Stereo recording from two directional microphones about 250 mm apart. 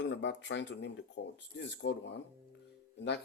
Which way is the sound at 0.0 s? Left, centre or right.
Left.